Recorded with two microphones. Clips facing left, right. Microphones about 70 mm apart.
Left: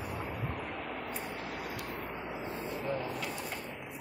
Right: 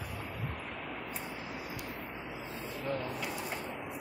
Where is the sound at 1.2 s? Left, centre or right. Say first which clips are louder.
Left 2 dB; left.